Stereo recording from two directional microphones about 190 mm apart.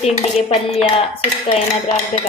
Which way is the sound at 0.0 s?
35° left (ahead or behind).